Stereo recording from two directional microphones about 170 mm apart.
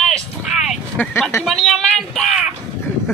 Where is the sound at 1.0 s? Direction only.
10° left (ahead or behind).